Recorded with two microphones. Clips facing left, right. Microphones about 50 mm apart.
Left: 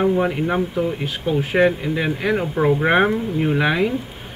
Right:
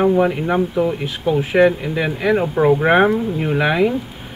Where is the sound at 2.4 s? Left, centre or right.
Centre.